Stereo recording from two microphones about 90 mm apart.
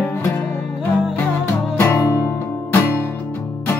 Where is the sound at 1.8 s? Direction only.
30° left (ahead or behind).